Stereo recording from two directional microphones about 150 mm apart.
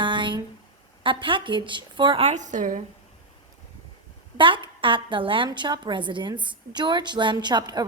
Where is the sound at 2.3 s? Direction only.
55° right (ahead or behind).